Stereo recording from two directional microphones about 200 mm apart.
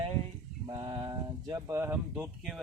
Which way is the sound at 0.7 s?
25° right (ahead or behind).